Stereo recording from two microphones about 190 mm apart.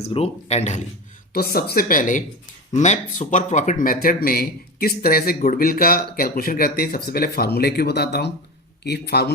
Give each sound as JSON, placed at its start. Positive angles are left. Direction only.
{"t": 0.0, "sound": "speech", "side_deg": 35}
{"t": 1.3, "sound": "speech", "side_deg": 50}